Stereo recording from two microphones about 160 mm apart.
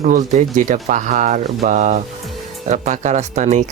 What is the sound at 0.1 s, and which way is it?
Speech, 50° right (ahead or behind).